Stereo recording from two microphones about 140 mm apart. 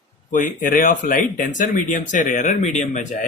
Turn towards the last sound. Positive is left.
turn(degrees=60)  # may be behind; listen again after turning